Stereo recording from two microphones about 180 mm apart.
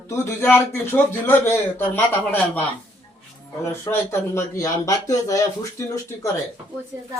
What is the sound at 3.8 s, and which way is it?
A man's voice, 15° left (ahead or behind).